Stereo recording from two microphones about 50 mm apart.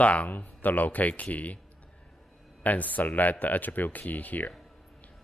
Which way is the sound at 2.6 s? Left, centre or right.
Left.